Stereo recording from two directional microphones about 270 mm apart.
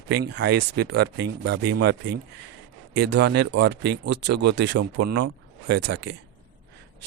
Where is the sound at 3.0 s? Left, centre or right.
Right.